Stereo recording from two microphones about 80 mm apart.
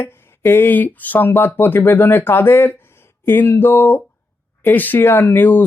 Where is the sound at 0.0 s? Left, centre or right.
Left.